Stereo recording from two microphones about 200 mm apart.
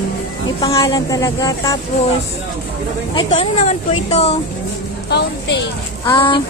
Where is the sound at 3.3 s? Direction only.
35° left (ahead or behind).